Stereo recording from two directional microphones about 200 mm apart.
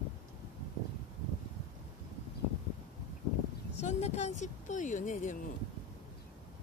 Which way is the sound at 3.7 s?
35° left (ahead or behind).